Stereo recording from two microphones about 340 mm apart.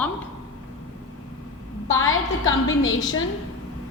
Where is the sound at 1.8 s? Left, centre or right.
Left.